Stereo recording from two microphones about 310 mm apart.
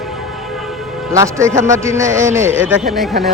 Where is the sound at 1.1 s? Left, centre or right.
Centre.